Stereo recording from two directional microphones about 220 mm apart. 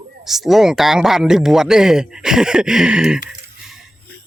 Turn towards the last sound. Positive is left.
turn(degrees=-5)  # may be behind; listen again after turning